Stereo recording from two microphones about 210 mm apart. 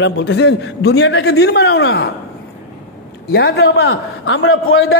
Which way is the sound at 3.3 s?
50° left (ahead or behind).